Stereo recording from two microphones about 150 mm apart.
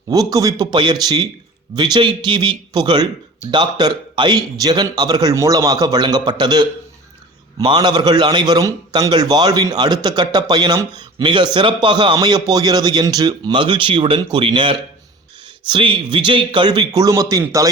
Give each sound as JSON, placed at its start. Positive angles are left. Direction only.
{"t": 0.1, "sound": "a man's voice", "side_deg": -25}